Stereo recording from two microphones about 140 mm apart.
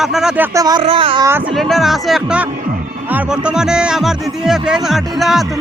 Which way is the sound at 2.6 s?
80° right.